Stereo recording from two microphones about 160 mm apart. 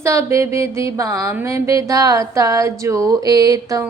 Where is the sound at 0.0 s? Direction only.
20° right (ahead or behind).